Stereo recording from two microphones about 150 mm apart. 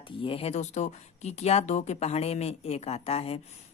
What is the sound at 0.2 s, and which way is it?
Speech, 40° left (ahead or behind).